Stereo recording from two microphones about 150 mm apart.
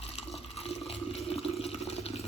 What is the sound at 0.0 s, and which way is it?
Toilet flush, 45° left (ahead or behind).